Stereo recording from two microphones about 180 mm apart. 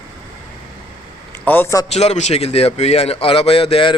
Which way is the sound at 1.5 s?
15° left (ahead or behind).